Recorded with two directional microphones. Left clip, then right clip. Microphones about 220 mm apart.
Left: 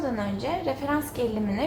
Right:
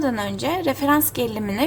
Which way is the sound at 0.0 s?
60° right (ahead or behind).